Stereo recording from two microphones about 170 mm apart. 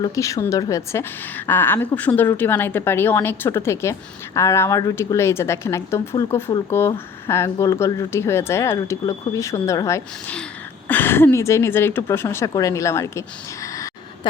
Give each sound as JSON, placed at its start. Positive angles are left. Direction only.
{"t": 0.0, "sound": "a woman's voice", "side_deg": 20}